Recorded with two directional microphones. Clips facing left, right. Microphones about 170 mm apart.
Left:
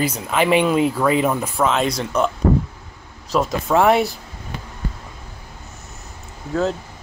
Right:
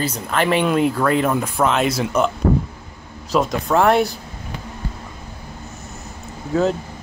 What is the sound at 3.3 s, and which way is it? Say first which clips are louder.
Speech: even; centre (ahead or behind).